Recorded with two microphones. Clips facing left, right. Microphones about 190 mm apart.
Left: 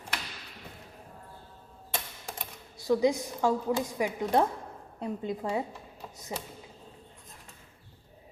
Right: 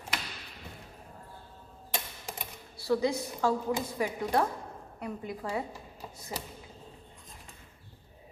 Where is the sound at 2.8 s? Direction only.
15° left (ahead or behind).